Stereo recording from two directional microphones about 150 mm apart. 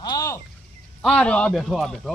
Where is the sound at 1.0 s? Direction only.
5° left (ahead or behind).